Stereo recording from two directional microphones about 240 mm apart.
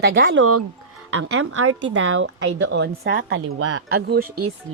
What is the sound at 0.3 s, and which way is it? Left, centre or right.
A woman's voice, right.